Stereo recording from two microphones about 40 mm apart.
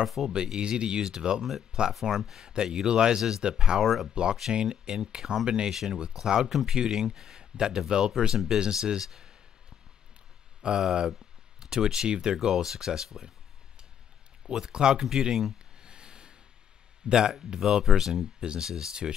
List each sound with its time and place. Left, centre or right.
0.0 s speech: centre
0.3 s speech: centre
3.8 s speech: centre
4.1 s speech: right
10.6 s speech: centre
14.7 s speech: centre
15.0 s speech: centre
15.8 s a sound: right
17.1 s speech: centre
18.4 s speech: centre